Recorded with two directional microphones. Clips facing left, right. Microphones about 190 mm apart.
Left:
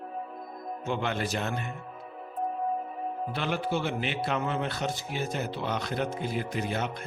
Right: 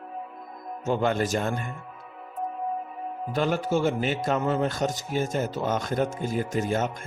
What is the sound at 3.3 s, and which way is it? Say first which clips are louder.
A man's voice: right 7 dB; 45° right (ahead or behind).